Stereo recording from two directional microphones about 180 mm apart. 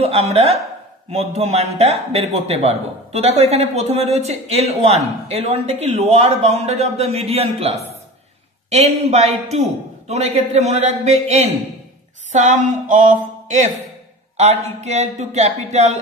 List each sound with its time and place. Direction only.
0.0 s speech: 35° right (ahead or behind)
12.3 s a sound: 40° right (ahead or behind)
14.3 s speech: 40° right (ahead or behind)